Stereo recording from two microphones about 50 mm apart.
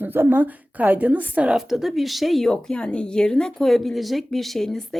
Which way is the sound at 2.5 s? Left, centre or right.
Centre.